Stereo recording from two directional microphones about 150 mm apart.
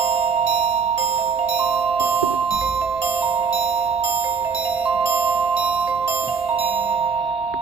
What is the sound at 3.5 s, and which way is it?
Music, 40° right (ahead or behind).